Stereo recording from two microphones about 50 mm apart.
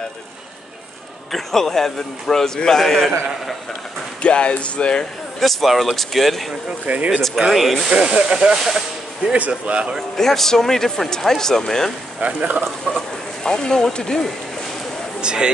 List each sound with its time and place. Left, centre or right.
1.3 s speech: centre
4.2 s speech: left
5.4 s speech: centre
6.9 s speech: right
7.3 s speech: centre
8.1 s speech: centre
9.3 s speech: right
9.9 s speech: centre
12.2 s speech: right
12.6 s speech: centre
15.1 s speech: centre